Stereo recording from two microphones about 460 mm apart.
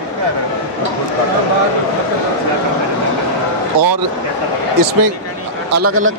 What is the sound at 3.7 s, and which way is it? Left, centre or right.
Speech, right.